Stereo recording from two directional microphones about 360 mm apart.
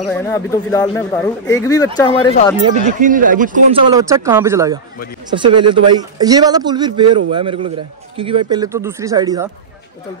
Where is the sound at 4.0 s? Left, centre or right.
Centre.